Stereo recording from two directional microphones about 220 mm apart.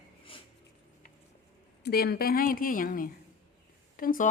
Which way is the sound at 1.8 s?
45° left (ahead or behind).